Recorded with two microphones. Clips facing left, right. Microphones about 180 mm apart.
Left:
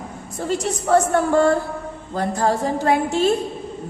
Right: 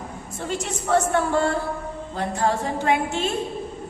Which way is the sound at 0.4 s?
40° left (ahead or behind).